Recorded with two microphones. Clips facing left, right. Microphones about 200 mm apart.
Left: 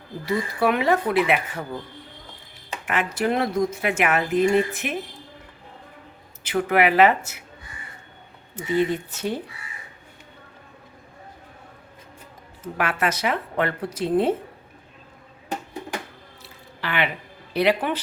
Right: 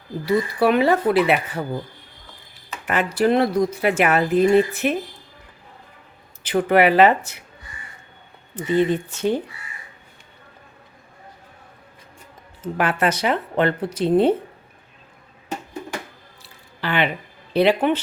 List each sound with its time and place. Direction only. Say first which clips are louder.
0.6 s speech: right 3 dB; 35° right (ahead or behind)
2.8 s speech: right 5 dB; 35° right (ahead or behind)
6.4 s speech: right 4 dB; 30° right (ahead or behind)
8.5 s speech: right 3 dB; 30° right (ahead or behind)
12.7 s speech: right 4 dB; 30° right (ahead or behind)
16.8 s a sound: right 4 dB; 30° right (ahead or behind)
17.5 s speech: right 4 dB; 30° right (ahead or behind)